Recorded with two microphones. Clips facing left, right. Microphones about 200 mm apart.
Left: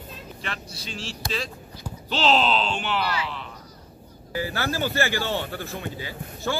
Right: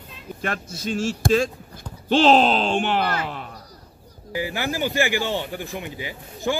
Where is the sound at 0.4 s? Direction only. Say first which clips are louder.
Right 9 dB; 50° right (ahead or behind).